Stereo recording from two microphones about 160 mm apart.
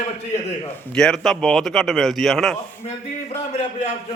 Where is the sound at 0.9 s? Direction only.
5° left (ahead or behind).